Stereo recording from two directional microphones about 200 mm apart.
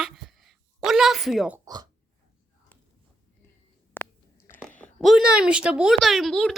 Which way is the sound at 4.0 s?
10° left (ahead or behind).